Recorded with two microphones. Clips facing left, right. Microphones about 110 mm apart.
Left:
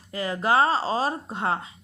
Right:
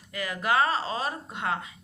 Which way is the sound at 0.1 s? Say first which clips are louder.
Left 4 dB; 30° left (ahead or behind).